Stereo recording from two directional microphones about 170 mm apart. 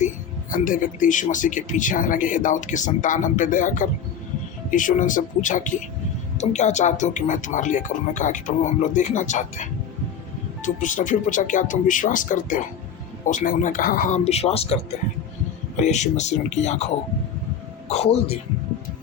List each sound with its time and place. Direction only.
0.5 s speech: 50° left (ahead or behind)
10.8 s speech: 50° left (ahead or behind)
14.3 s speech: 35° left (ahead or behind)
15.8 s speech: 45° left (ahead or behind)